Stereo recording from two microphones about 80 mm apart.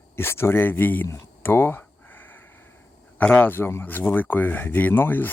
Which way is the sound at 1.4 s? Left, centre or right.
Left.